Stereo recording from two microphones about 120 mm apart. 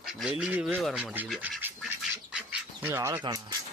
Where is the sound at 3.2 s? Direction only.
40° right (ahead or behind).